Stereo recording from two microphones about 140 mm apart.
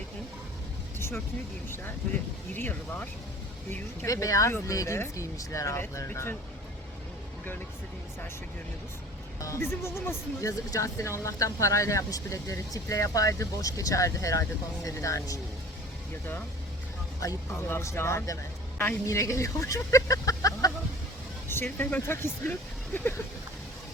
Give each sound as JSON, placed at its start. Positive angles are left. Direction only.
{"t": 0.9, "sound": "vehicle", "side_deg": 15}
{"t": 2.5, "sound": "speech", "side_deg": 15}
{"t": 4.1, "sound": "speech", "side_deg": 25}
{"t": 9.4, "sound": "speech", "side_deg": 20}
{"t": 17.2, "sound": "speech", "side_deg": 20}